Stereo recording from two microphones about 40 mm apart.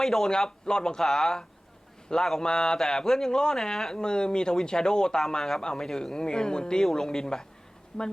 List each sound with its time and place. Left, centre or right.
0.0 s speech: centre